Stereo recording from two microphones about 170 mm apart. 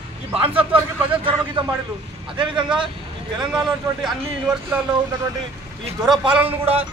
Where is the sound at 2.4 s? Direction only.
30° right (ahead or behind).